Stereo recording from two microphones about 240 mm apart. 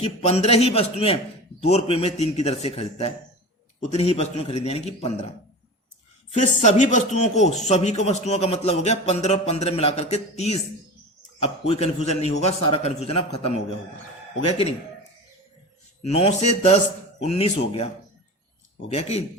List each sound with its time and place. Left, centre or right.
0.0 s speech: left
6.3 s speech: left
16.0 s speech: left
18.9 s speech: left